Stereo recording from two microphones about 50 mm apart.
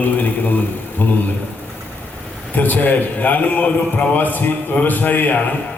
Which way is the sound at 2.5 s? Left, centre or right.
Left.